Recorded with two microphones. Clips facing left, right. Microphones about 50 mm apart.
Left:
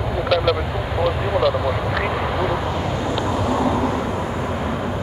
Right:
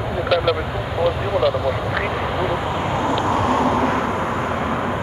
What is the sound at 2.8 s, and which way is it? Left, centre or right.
Vehicle, right.